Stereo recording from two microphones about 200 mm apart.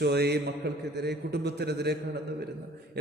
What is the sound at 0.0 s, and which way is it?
A man's voice, 55° right (ahead or behind).